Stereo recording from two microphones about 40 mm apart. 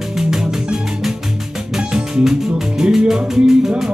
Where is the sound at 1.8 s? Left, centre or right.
Centre.